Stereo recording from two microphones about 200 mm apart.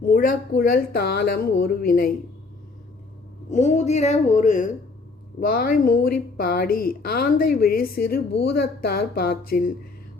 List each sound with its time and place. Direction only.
0.1 s a woman's voice: 45° left (ahead or behind)
3.5 s a woman's voice: 35° left (ahead or behind)